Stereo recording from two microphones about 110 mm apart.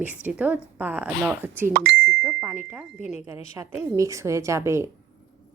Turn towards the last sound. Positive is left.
turn(degrees=-25)  # may be behind; listen again after turning